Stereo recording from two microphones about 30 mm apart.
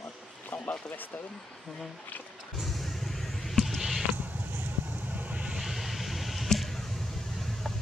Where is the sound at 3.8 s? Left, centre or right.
Centre.